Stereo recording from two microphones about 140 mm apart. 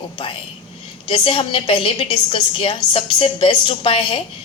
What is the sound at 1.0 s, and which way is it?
A woman's voice, 40° left (ahead or behind).